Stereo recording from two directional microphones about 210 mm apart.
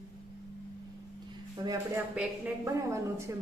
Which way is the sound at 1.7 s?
10° right (ahead or behind).